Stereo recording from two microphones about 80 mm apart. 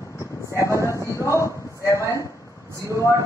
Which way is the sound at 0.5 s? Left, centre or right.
Left.